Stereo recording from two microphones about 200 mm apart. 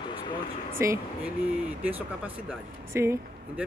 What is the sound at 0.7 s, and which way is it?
Speech, 15° right (ahead or behind).